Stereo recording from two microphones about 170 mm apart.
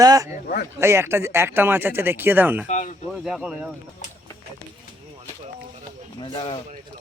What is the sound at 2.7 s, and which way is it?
Speech, 45° left (ahead or behind).